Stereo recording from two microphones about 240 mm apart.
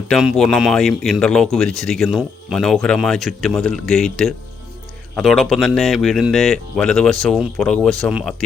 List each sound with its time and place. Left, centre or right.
0.1 s speech: centre